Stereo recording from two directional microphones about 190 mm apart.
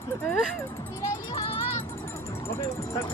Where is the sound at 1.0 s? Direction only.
20° left (ahead or behind).